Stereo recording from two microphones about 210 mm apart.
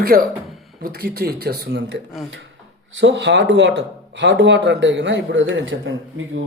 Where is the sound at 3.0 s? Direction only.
55° right (ahead or behind).